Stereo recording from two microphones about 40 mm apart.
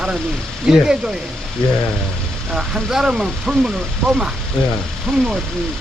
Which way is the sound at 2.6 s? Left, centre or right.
Centre.